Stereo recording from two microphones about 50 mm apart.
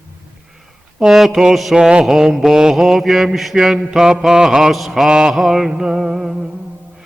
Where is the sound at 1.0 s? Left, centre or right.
Centre.